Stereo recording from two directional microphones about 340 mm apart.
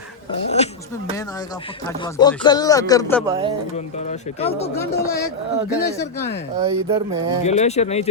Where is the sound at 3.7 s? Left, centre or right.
Centre.